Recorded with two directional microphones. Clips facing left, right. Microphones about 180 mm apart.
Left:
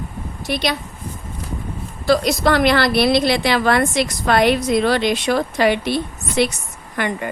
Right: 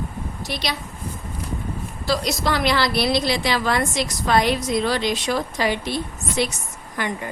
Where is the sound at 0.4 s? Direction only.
55° left (ahead or behind).